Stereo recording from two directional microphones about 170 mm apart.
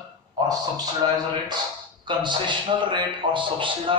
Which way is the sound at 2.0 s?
25° right (ahead or behind).